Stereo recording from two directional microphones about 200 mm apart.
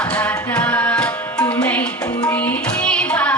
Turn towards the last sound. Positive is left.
turn(degrees=5)  # may be behind; listen again after turning